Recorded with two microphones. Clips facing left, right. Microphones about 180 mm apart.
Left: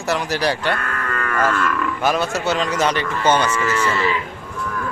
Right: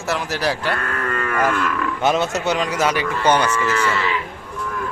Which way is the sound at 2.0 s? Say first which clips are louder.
Right 1 dB; 20° right (ahead or behind).